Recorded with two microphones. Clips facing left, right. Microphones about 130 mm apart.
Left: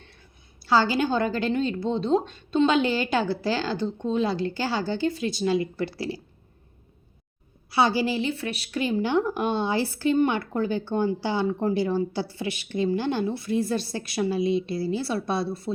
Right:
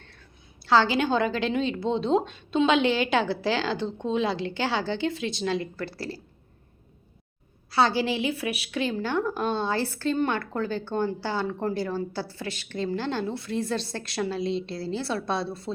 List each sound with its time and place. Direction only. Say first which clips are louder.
0.0 s a sound: even; 15° left (ahead or behind)
0.6 s a woman's voice: even; 5° left (ahead or behind)
5.7 s speech: left 4 dB; 15° left (ahead or behind)
7.7 s speech: left 1 dB; 10° left (ahead or behind)
8.3 s speech: even; 10° right (ahead or behind)
8.8 s speech: left 3 dB; 15° left (ahead or behind)